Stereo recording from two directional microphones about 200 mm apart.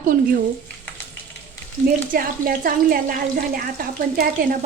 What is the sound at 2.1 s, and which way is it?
Speech, 45° right (ahead or behind).